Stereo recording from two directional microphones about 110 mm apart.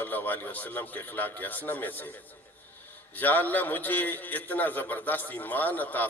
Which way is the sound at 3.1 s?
15° left (ahead or behind).